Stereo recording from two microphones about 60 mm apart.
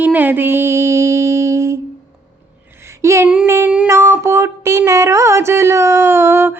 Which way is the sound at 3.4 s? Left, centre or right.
Right.